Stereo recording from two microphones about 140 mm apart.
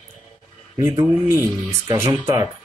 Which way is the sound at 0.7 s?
25° right (ahead or behind).